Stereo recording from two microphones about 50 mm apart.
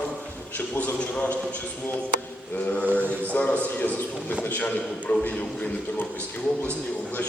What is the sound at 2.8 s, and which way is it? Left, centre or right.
Speech, right.